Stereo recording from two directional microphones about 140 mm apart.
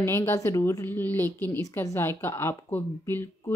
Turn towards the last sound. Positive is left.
turn(degrees=15)  # may be behind; listen again after turning